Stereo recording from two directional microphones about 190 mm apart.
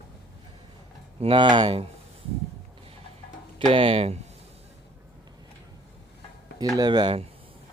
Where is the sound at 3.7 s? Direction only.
30° right (ahead or behind).